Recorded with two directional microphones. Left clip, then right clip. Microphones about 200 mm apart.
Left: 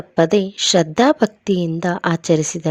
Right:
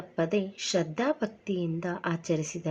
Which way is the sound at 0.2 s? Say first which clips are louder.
Left 14 dB; 45° left (ahead or behind).